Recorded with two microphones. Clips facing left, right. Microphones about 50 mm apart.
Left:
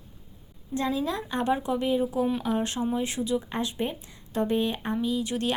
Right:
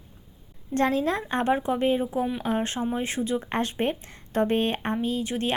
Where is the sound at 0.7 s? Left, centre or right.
Right.